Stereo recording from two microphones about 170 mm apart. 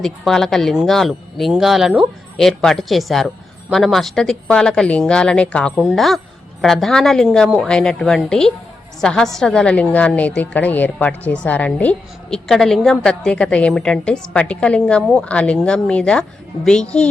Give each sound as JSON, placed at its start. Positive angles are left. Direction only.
{"t": 0.0, "sound": "a woman's voice", "side_deg": 0}